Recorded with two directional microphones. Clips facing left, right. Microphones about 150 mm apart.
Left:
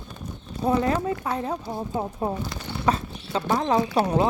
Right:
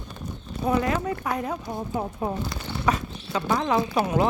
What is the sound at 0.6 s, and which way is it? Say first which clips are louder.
Speech: left 1 dB; 30° left (ahead or behind).